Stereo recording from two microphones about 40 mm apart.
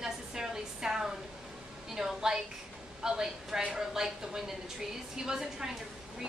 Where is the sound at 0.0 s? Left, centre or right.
Centre.